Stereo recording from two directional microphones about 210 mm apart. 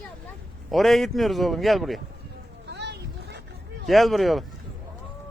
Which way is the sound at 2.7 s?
55° right (ahead or behind).